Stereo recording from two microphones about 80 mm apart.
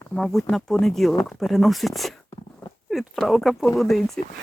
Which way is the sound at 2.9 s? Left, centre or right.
Centre.